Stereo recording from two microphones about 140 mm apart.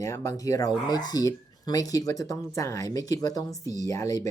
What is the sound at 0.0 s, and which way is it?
Speech, 25° left (ahead or behind).